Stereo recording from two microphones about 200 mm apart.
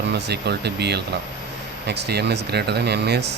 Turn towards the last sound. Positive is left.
turn(degrees=-55)  # may be behind; listen again after turning